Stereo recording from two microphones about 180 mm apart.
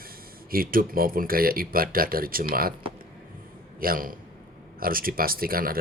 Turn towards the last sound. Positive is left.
turn(degrees=-55)  # may be behind; listen again after turning